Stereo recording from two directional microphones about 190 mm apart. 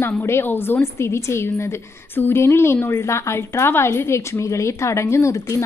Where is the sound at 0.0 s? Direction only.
10° left (ahead or behind).